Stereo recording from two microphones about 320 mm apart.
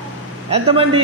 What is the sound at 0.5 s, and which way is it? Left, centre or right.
Speech, centre.